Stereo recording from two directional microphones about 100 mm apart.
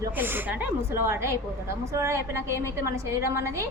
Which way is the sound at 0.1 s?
20° right (ahead or behind).